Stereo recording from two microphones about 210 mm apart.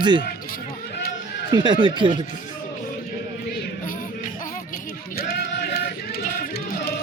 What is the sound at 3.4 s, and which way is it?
Music, 50° left (ahead or behind).